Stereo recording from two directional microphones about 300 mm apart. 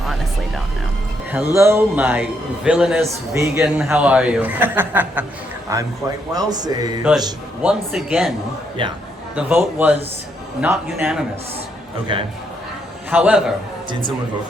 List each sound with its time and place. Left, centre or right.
0.0 s music: centre
1.5 s a man's voice: centre
7.7 s speech: centre
8.8 s a man's voice: centre
9.3 s a man's voice: centre
12.1 s a man's voice: centre
13.1 s a man's voice: centre